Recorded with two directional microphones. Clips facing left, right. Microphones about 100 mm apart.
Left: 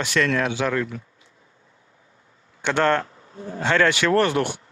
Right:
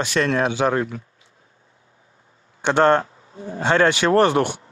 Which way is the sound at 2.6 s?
25° right (ahead or behind).